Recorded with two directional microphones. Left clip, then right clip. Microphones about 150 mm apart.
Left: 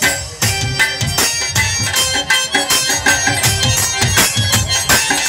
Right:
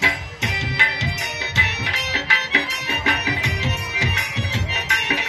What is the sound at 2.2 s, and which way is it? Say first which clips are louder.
Music: left 2 dB; 45° left (ahead or behind).